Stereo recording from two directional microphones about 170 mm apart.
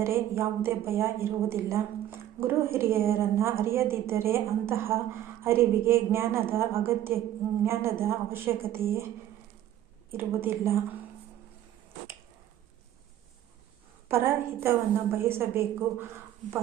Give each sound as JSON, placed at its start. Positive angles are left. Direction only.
{"t": 0.0, "sound": "a woman's voice", "side_deg": -15}
{"t": 10.1, "sound": "a woman's voice", "side_deg": -15}
{"t": 14.1, "sound": "a woman's voice", "side_deg": -15}